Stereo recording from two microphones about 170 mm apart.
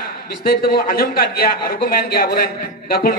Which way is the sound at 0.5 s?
60° left (ahead or behind).